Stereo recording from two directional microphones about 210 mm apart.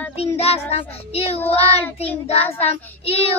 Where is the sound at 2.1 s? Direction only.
10° left (ahead or behind).